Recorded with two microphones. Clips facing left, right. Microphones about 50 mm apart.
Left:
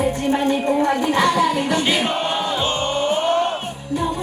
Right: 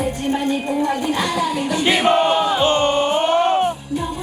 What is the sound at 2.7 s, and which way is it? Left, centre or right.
Choir, right.